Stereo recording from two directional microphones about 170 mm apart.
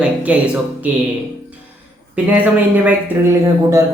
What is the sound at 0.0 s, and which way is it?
Music, 10° right (ahead or behind).